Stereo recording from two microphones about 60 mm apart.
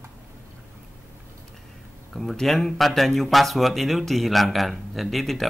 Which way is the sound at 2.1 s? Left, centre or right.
Centre.